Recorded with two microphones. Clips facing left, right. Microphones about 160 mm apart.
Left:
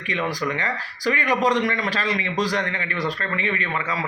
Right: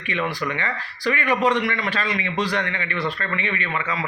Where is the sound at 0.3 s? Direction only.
40° left (ahead or behind).